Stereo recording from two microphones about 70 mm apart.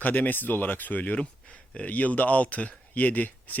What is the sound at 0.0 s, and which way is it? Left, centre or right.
Speech, left.